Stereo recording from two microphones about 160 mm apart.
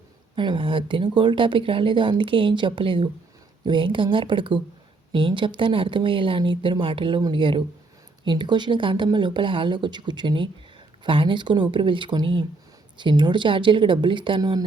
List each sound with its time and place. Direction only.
0.3 s speech: 30° right (ahead or behind)